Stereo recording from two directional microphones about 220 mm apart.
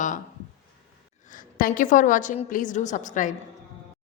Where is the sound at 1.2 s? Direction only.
35° left (ahead or behind).